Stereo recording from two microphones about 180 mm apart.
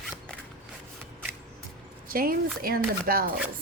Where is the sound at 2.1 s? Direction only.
55° right (ahead or behind).